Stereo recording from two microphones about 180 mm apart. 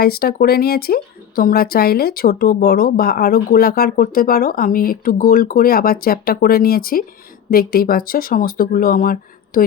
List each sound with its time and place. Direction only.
0.0 s speech: 60° left (ahead or behind)